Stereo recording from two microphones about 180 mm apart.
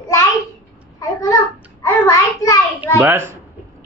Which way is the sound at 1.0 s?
20° left (ahead or behind).